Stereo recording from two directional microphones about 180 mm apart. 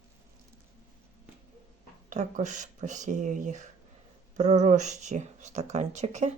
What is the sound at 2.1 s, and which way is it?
Speech, 45° right (ahead or behind).